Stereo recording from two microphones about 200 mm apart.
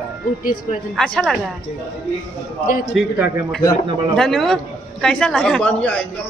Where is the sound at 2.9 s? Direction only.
5° right (ahead or behind).